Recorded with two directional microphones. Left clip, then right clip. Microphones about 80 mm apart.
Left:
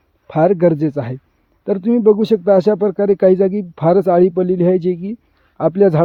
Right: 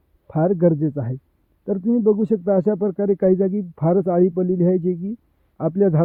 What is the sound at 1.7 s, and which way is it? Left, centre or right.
Speech, centre.